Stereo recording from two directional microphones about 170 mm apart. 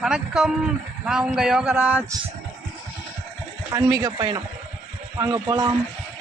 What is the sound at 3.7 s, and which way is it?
Speech, 20° right (ahead or behind).